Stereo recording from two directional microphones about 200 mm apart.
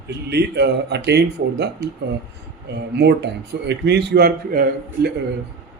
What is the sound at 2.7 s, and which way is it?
Speech, 55° right (ahead or behind).